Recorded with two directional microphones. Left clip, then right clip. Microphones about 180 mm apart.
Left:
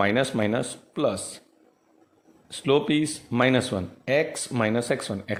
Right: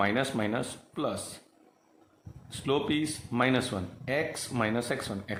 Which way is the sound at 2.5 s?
35° left (ahead or behind).